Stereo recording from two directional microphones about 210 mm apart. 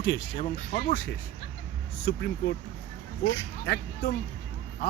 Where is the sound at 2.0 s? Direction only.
55° left (ahead or behind).